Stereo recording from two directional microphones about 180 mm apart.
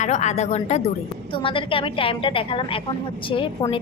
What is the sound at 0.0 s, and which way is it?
A woman's voice, 40° left (ahead or behind).